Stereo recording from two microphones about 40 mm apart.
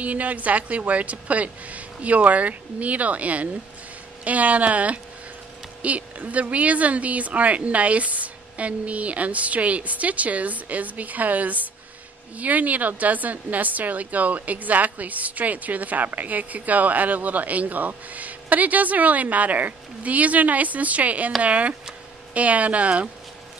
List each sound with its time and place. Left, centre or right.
0.0 s speech: right